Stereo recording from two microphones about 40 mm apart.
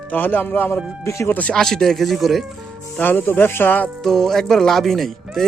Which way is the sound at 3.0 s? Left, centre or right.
Left.